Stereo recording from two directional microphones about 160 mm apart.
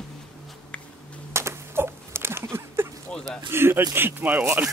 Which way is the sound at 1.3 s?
15° right (ahead or behind).